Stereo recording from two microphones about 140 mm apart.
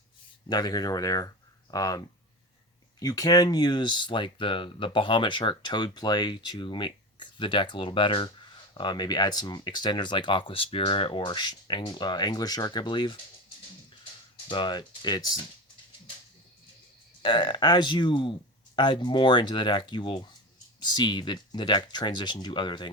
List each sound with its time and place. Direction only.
0.4 s speech: 30° left (ahead or behind)
17.2 s speech: 30° left (ahead or behind)